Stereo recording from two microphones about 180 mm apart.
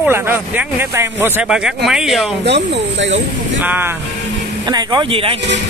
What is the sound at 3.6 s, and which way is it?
Speech, 10° right (ahead or behind).